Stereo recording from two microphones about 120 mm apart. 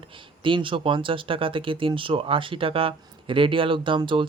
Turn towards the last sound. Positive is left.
turn(degrees=-45)  # may be behind; listen again after turning